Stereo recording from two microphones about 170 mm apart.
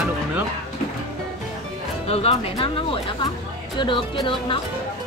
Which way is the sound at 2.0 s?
35° left (ahead or behind).